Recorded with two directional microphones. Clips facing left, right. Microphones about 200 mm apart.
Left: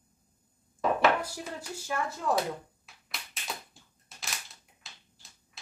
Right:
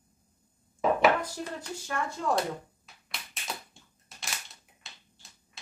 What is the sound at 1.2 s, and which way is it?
Speech, 10° left (ahead or behind).